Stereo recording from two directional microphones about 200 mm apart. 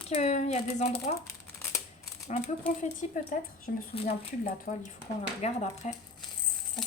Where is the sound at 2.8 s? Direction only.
40° left (ahead or behind).